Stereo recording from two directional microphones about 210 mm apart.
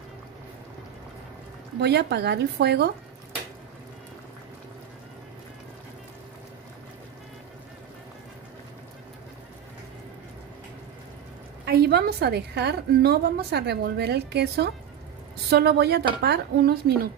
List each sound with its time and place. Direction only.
1.8 s a woman's voice: 55° right (ahead or behind)
11.6 s a woman's voice: 50° right (ahead or behind)